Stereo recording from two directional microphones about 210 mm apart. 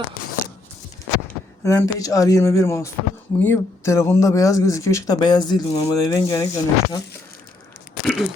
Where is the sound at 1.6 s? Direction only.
15° left (ahead or behind).